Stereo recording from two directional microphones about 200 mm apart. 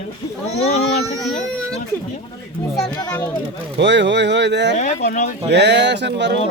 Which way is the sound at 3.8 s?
60° right (ahead or behind).